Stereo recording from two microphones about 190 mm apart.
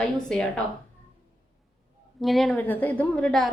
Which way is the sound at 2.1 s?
Centre (ahead or behind).